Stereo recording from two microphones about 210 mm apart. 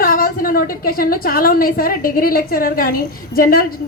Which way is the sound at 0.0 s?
40° left (ahead or behind).